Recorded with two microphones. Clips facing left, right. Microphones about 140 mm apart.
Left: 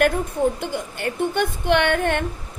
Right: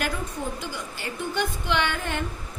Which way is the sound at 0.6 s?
55° left (ahead or behind).